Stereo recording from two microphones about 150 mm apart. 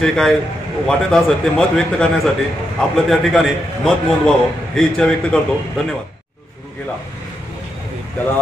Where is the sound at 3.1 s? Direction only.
Centre (ahead or behind).